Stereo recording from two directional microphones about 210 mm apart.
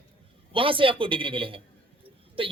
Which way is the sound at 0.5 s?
25° right (ahead or behind).